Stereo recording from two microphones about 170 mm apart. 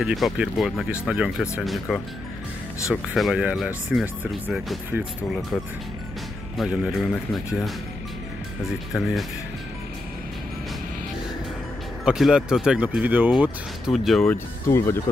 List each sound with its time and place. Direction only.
0.0 s speech: centre (ahead or behind)
6.5 s speech: centre (ahead or behind)
12.0 s speech: 5° right (ahead or behind)
14.2 s speech: 15° left (ahead or behind)